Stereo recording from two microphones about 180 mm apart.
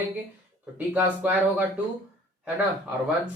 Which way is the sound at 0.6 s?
10° right (ahead or behind).